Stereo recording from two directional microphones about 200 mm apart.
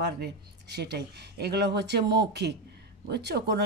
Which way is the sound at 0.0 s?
55° right (ahead or behind).